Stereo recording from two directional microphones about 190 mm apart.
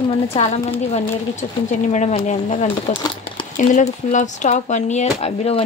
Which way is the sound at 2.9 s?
25° left (ahead or behind).